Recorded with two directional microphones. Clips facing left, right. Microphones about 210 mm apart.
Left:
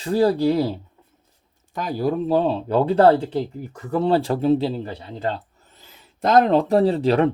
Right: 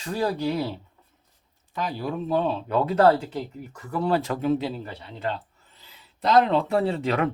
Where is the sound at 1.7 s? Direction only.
45° left (ahead or behind).